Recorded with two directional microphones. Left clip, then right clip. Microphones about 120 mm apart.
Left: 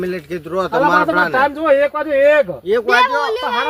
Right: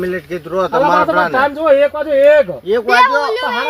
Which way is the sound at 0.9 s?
70° left (ahead or behind).